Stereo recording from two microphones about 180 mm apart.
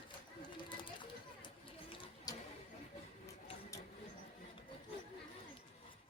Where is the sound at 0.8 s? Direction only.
25° left (ahead or behind).